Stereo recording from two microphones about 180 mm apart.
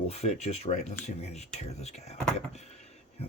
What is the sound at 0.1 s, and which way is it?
Speech, 35° left (ahead or behind).